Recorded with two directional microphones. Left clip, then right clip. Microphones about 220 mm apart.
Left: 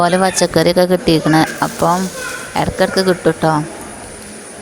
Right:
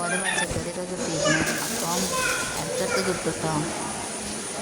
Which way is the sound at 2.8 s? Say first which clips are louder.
Left 6 dB; 40° left (ahead or behind).